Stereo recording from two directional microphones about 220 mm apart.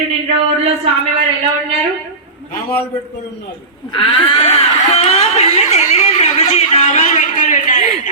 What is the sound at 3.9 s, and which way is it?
A woman's voice, 25° left (ahead or behind).